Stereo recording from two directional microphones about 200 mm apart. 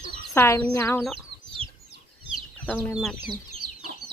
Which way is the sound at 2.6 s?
10° left (ahead or behind).